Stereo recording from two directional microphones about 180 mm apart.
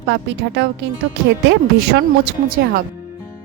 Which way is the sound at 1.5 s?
70° right (ahead or behind).